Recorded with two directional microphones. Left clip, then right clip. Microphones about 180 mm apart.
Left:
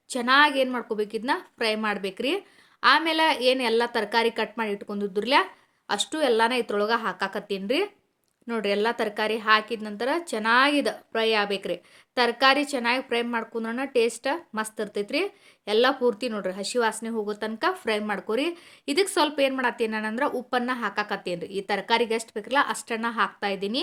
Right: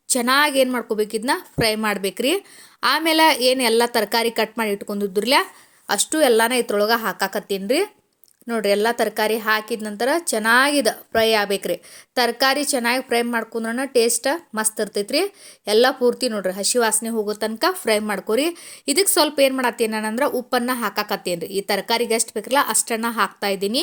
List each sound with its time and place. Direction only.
0.1 s a woman's voice: 40° right (ahead or behind)